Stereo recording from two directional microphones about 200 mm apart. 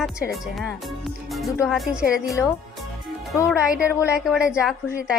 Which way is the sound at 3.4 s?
5° right (ahead or behind).